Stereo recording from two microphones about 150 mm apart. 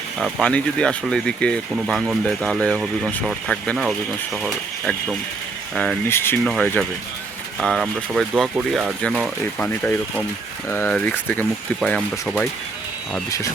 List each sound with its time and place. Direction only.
0.2 s speech: centre (ahead or behind)
6.1 s speech: 15° left (ahead or behind)
6.4 s speech: 5° left (ahead or behind)